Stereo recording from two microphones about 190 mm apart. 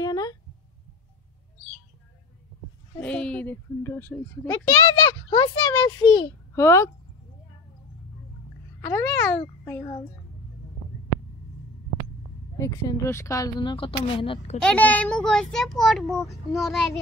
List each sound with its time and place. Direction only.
0.0 s a sound: 20° left (ahead or behind)
3.0 s a child's voice: 5° left (ahead or behind)
8.8 s a child's voice: 15° left (ahead or behind)
12.5 s speech: 20° left (ahead or behind)
14.6 s a child's voice: 5° left (ahead or behind)